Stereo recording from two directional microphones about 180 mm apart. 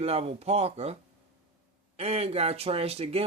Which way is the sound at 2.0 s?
35° right (ahead or behind).